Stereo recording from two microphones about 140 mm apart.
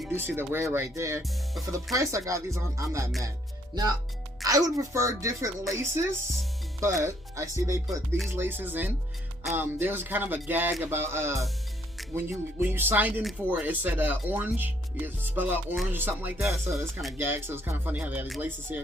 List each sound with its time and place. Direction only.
0.1 s speech: 15° right (ahead or behind)
4.4 s speech: 25° right (ahead or behind)
16.5 s speech: centre (ahead or behind)
17.2 s speech: 15° right (ahead or behind)